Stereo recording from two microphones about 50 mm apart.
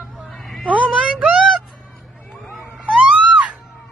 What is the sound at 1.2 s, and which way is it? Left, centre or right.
Music, centre.